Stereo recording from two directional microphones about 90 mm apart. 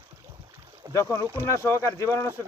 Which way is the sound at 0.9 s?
35° left (ahead or behind).